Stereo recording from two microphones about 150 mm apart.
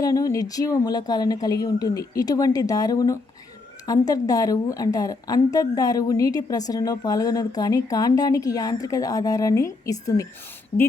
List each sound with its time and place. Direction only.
0.0 s a woman's voice: 20° left (ahead or behind)
10.7 s speech: 45° left (ahead or behind)